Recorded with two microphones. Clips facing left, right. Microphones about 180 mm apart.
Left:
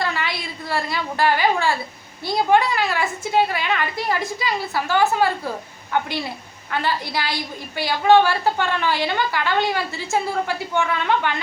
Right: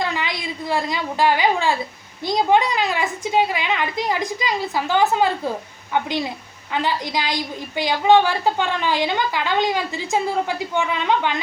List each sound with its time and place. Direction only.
0.0 s a woman's voice: 15° right (ahead or behind)